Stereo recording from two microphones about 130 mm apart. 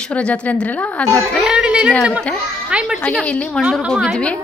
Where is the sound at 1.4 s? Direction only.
5° right (ahead or behind).